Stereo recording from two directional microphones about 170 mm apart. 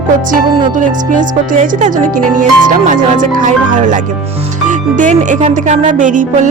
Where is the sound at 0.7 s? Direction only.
50° right (ahead or behind).